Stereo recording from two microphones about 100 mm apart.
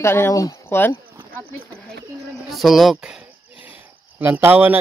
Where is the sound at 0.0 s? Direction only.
25° left (ahead or behind).